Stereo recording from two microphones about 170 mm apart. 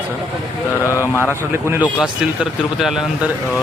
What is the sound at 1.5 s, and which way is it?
Speech, 15° right (ahead or behind).